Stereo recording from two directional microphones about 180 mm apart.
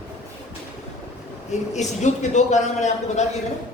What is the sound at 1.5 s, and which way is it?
A man's voice, 40° left (ahead or behind).